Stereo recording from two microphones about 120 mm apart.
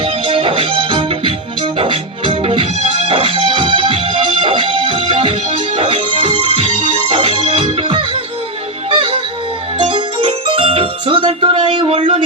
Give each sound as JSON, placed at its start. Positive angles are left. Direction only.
{"t": 0.0, "sound": "music", "side_deg": -50}
{"t": 6.5, "sound": "music", "side_deg": -60}